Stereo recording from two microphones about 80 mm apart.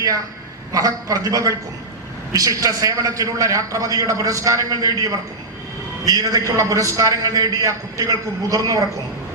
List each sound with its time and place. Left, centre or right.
0.7 s a man's voice: right